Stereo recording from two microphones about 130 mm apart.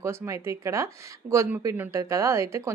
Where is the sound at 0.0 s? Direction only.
20° right (ahead or behind).